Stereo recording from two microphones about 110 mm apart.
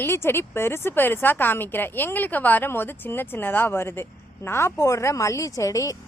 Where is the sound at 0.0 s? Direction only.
20° left (ahead or behind).